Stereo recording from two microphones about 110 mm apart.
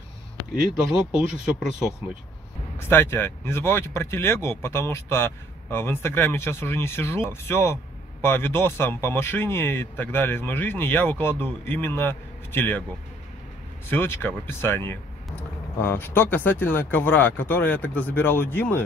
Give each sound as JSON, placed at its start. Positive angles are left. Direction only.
{"t": 0.9, "sound": "speech", "side_deg": -10}
{"t": 2.8, "sound": "speech", "side_deg": 20}
{"t": 13.8, "sound": "speech", "side_deg": 20}